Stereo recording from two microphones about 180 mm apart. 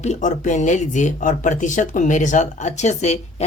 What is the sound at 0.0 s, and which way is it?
Speech, 40° left (ahead or behind).